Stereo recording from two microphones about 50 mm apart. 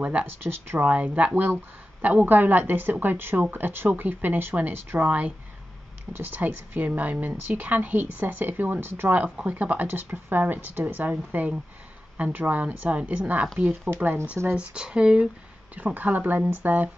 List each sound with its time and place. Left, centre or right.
0.0 s speech: right
0.4 s speech: right
0.8 s a woman's voice: right
9.4 s a woman's voice: right
14.5 s speech: right
15.7 s a woman's voice: right